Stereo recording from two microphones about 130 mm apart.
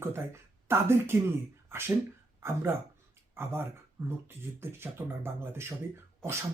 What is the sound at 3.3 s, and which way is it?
Speech, 15° right (ahead or behind).